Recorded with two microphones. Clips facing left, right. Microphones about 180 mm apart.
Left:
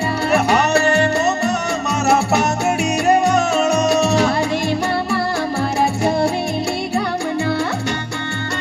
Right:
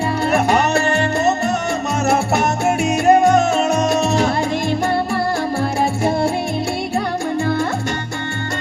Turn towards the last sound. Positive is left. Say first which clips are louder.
# right 1 dB
turn(degrees=-50)  # may be behind; listen again after turning